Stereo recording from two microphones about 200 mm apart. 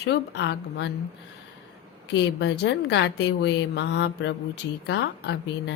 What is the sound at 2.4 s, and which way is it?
A woman's voice, 60° left (ahead or behind).